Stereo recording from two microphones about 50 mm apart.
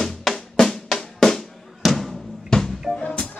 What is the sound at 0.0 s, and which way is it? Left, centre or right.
Drum, centre.